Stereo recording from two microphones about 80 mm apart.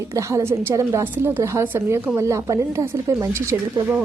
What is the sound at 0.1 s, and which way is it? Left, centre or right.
Speech, right.